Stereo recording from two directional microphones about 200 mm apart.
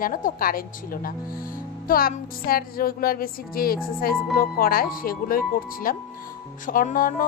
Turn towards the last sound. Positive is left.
turn(degrees=40)  # may be behind; listen again after turning